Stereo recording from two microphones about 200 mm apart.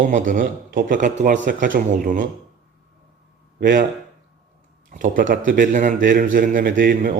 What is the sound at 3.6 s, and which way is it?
Speech, 45° right (ahead or behind).